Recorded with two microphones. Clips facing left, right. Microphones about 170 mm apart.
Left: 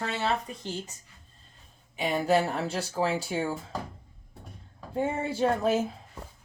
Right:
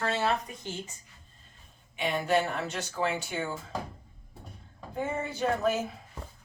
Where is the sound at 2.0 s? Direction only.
35° left (ahead or behind).